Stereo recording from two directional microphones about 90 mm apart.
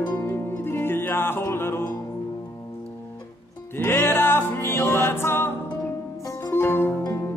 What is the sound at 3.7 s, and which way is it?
Music, 25° left (ahead or behind).